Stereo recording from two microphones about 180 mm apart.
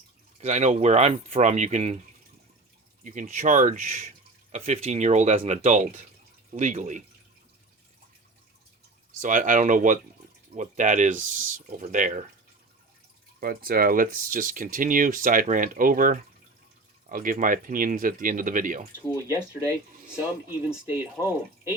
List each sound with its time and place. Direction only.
0.3 s speech: 40° right (ahead or behind)
3.0 s speech: 45° right (ahead or behind)
9.1 s speech: 45° right (ahead or behind)
13.4 s speech: 55° right (ahead or behind)
20.7 s speech: 10° right (ahead or behind)